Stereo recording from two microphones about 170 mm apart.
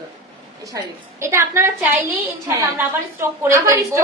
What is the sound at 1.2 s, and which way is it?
A woman's voice, 15° right (ahead or behind).